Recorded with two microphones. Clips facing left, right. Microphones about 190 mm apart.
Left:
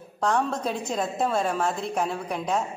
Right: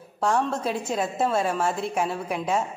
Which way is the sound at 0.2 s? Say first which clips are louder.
Right 1 dB; 5° right (ahead or behind).